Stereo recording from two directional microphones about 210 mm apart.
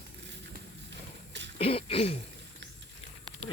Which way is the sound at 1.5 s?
30° left (ahead or behind).